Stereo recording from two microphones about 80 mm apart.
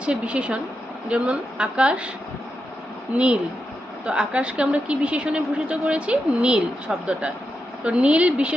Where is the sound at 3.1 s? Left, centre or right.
Centre.